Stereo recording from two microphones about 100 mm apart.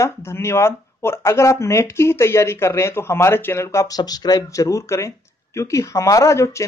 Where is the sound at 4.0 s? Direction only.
45° left (ahead or behind).